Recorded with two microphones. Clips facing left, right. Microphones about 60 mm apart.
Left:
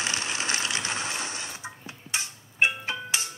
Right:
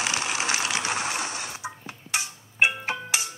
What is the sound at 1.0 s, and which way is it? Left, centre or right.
Sewing machine, right.